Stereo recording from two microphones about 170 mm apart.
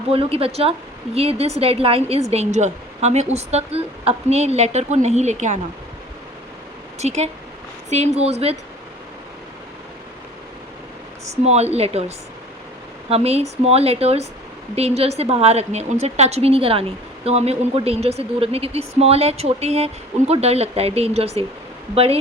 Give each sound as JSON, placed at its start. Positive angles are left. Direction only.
{"t": 0.1, "sound": "speech", "side_deg": -35}
{"t": 7.0, "sound": "speech", "side_deg": -40}
{"t": 11.3, "sound": "speech", "side_deg": -40}